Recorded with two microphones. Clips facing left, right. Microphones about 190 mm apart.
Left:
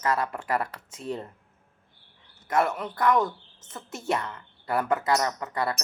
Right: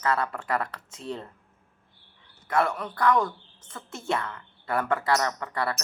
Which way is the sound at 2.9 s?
20° left (ahead or behind).